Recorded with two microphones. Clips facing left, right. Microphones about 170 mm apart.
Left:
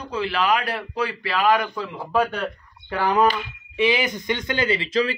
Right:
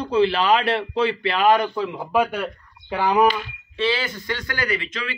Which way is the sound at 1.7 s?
10° right (ahead or behind).